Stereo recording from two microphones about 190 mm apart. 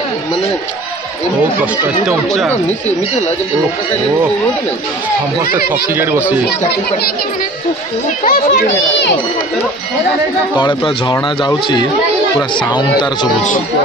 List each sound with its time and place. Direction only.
2.0 s speech: centre (ahead or behind)
5.9 s speech: 10° right (ahead or behind)
8.2 s a child's voice: 50° left (ahead or behind)
8.6 s speech: 65° left (ahead or behind)
10.5 s speech: 25° left (ahead or behind)